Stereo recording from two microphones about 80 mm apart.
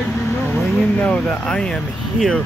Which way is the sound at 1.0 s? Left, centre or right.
Centre.